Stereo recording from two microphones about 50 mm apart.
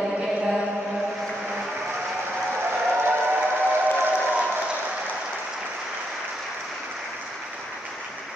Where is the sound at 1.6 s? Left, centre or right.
Centre.